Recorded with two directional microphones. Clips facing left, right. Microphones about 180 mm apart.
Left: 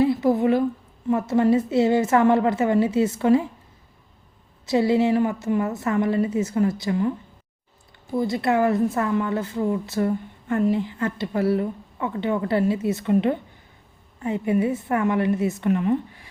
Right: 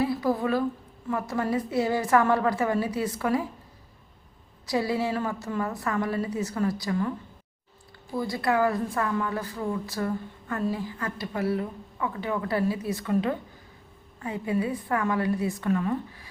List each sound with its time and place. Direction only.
0.0 s a woman's voice: 25° left (ahead or behind)
4.6 s a woman's voice: 25° left (ahead or behind)
8.1 s a woman's voice: 20° left (ahead or behind)